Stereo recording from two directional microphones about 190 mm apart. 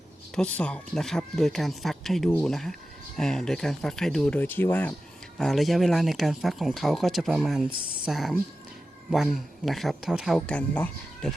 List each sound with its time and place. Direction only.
0.3 s speech: 5° left (ahead or behind)